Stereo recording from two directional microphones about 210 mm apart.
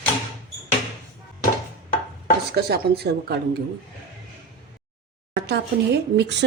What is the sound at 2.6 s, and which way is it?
A woman's voice, 50° right (ahead or behind).